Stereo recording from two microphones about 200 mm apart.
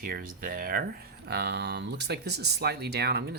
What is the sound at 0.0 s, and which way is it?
Speech, 45° right (ahead or behind).